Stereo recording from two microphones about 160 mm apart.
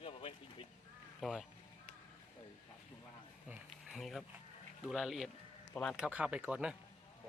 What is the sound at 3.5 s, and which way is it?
Speech, centre (ahead or behind).